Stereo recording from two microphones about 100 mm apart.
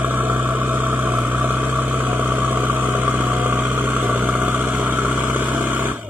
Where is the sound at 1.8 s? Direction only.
15° right (ahead or behind).